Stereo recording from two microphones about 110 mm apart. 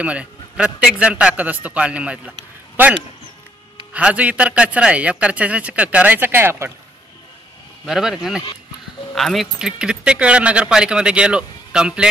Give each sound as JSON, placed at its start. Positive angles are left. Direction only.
{"t": 0.0, "sound": "speech", "side_deg": -10}
{"t": 7.8, "sound": "speech", "side_deg": -5}